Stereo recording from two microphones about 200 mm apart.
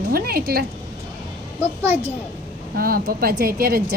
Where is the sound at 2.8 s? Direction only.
45° right (ahead or behind).